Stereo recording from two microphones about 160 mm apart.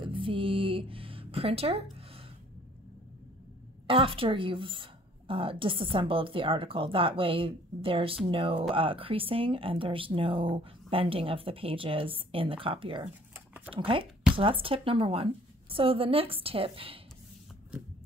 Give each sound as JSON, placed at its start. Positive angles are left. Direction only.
{"t": 0.0, "sound": "music", "side_deg": -30}
{"t": 3.8, "sound": "speech", "side_deg": -35}